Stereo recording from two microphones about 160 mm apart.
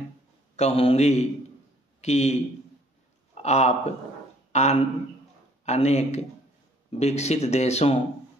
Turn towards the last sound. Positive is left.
turn(degrees=40)  # may be behind; listen again after turning